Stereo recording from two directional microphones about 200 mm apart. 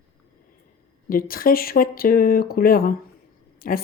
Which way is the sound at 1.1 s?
45° left (ahead or behind).